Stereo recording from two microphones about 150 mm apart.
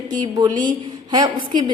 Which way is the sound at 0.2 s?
30° right (ahead or behind).